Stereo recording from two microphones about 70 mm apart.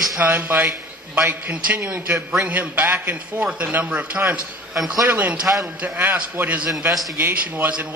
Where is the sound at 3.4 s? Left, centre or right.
Centre.